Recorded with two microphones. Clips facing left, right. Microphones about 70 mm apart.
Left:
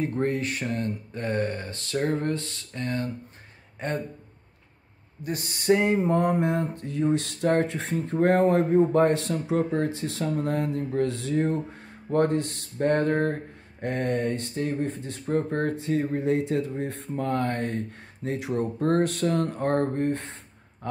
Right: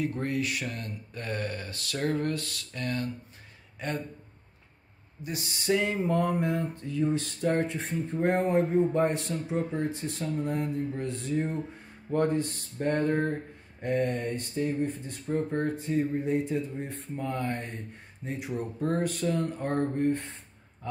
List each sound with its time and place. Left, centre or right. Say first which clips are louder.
0.0 s speech: left 4 dB; left
3.8 s a sound: left 4 dB; left
5.2 s a sound: left 4 dB; left
6.2 s mantra: left 4 dB; left
6.8 s speech: left 3 dB; left
12.7 s speech: left 4 dB; left
20.8 s speech: left 3 dB; left